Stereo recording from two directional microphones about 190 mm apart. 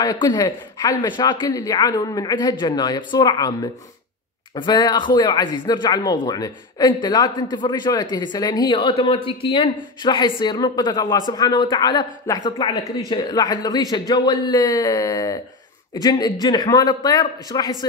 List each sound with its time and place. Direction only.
0.0 s speech: 20° left (ahead or behind)
4.6 s speech: 25° left (ahead or behind)